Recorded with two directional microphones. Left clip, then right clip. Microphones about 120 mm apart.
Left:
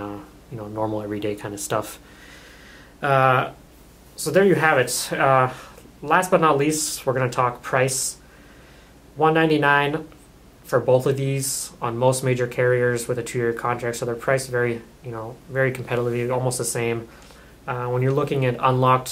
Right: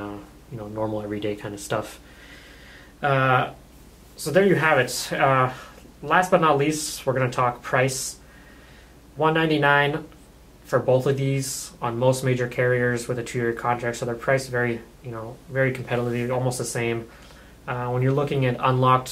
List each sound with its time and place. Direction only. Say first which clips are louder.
0.0 s speech: left 2 dB; 30° left (ahead or behind)
3.0 s speech: left 2 dB; 35° left (ahead or behind)
9.2 s speech: left 2 dB; 30° left (ahead or behind)